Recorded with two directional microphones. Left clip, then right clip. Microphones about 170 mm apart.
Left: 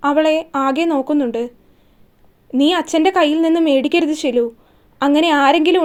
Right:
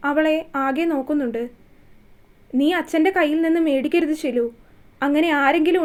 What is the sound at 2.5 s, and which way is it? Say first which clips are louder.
Speech: left 4 dB; 35° left (ahead or behind).